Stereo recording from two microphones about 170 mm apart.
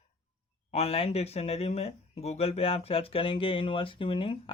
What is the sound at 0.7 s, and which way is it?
Speech, 40° left (ahead or behind).